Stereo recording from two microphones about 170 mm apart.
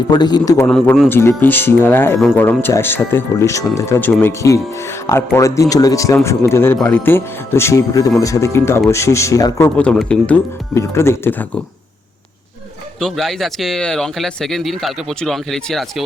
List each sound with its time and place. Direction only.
0.1 s a man's voice: 25° left (ahead or behind)
0.7 s speech: 5° left (ahead or behind)
10.8 s speech: 15° left (ahead or behind)
13.0 s speech: centre (ahead or behind)